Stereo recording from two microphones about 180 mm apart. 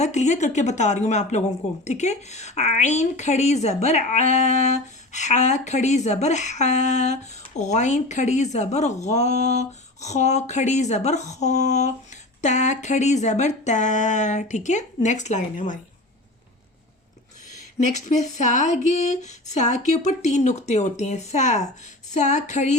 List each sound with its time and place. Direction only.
0.0 s speech: 40° left (ahead or behind)
17.7 s speech: 40° left (ahead or behind)